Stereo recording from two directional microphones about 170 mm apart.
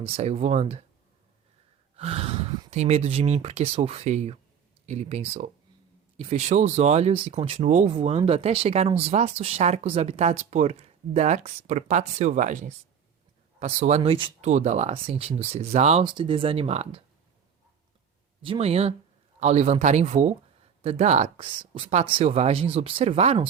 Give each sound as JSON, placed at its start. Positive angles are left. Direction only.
{"t": 0.0, "sound": "speech", "side_deg": -40}
{"t": 2.0, "sound": "speech", "side_deg": -35}
{"t": 14.4, "sound": "speech", "side_deg": -40}
{"t": 16.0, "sound": "speech", "side_deg": -30}
{"t": 18.4, "sound": "speech", "side_deg": -35}